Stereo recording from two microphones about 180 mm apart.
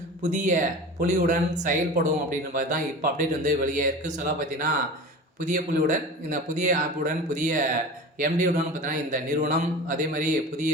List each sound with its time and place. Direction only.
0.2 s a man's voice: 40° right (ahead or behind)